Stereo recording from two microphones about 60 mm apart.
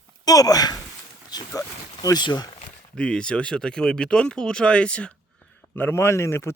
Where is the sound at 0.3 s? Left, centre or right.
Left.